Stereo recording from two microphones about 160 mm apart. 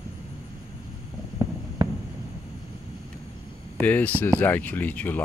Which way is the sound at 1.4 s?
25° right (ahead or behind).